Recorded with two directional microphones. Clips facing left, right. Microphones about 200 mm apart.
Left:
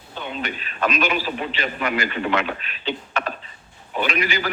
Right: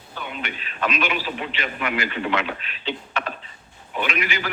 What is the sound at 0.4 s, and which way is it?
A man's voice, 40° left (ahead or behind).